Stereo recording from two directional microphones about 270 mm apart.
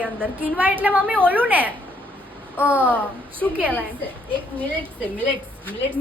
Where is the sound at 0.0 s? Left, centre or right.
Centre.